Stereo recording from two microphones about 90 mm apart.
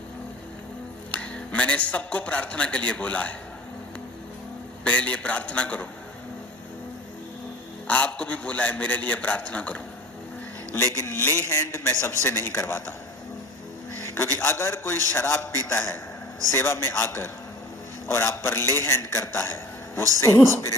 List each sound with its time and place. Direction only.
1.1 s a man's voice: 15° left (ahead or behind)
4.8 s a man's voice: 15° left (ahead or behind)
7.9 s a man's voice: 15° left (ahead or behind)
10.8 s a man's voice: 30° left (ahead or behind)
13.9 s a man's voice: 30° left (ahead or behind)